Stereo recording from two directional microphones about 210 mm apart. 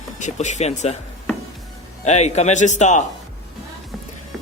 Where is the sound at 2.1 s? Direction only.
30° left (ahead or behind).